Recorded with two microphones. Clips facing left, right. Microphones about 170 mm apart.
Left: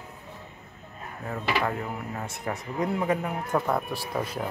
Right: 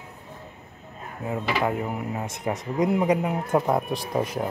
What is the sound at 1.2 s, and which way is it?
Speech, 15° right (ahead or behind).